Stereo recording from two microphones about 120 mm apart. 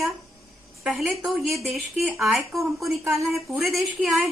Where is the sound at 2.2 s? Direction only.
Centre (ahead or behind).